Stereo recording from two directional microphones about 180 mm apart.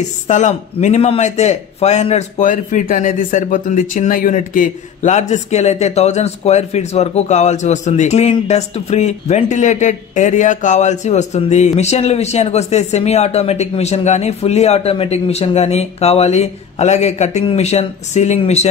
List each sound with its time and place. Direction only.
0.3 s a man's voice: 40° left (ahead or behind)